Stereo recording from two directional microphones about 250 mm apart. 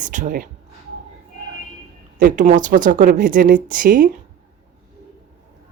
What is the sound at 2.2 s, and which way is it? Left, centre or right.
Speech, right.